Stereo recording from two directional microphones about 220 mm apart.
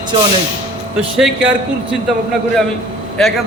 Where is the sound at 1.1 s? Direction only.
Centre (ahead or behind).